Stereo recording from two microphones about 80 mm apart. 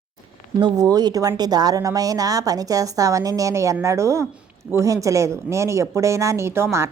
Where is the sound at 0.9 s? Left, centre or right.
Right.